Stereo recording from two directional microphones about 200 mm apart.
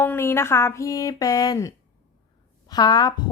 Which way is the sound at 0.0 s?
10° left (ahead or behind).